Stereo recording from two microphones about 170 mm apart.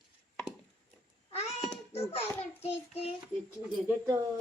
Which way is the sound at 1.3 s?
40° left (ahead or behind).